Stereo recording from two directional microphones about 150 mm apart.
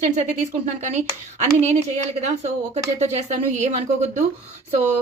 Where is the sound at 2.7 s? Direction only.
45° right (ahead or behind).